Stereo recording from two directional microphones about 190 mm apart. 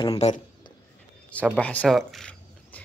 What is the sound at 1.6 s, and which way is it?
Speech, 5° left (ahead or behind).